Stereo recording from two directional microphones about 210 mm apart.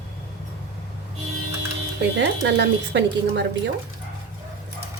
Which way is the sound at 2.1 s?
55° right (ahead or behind).